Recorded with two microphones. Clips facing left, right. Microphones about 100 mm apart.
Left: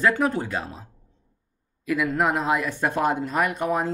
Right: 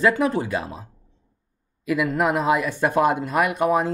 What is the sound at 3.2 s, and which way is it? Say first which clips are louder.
Speech: right 3 dB; 65° right (ahead or behind).